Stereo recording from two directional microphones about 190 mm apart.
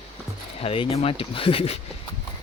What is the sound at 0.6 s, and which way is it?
Speech, 30° left (ahead or behind).